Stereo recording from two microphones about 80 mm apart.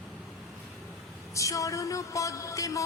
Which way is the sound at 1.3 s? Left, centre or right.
Left.